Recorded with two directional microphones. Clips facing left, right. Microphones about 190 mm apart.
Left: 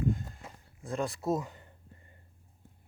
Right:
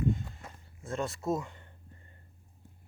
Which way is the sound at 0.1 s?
Centre (ahead or behind).